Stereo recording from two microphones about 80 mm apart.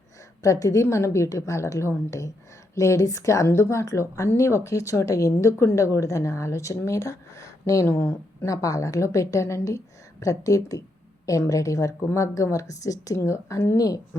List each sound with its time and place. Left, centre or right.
0.4 s speech: left
13.7 s speech: left